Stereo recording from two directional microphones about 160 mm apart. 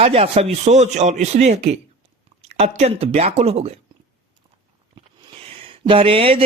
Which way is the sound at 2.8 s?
40° right (ahead or behind).